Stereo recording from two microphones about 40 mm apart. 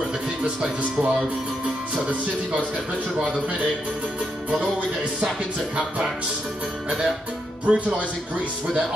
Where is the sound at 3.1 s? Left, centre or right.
Right.